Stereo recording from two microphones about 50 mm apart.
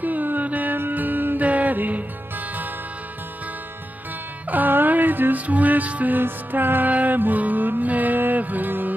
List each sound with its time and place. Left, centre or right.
0.0 s music: right
4.5 s music: right